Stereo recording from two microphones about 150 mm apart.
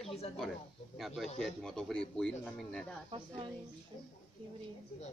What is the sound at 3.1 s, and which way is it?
Speech, 35° right (ahead or behind).